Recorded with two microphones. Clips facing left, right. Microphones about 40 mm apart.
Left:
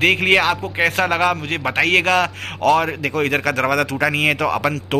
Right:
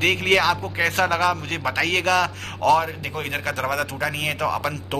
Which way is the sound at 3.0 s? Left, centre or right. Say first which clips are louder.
Left 8 dB; left.